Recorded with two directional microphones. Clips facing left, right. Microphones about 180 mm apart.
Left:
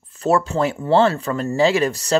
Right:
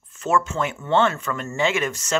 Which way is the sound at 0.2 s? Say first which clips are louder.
Left 4 dB; 35° left (ahead or behind).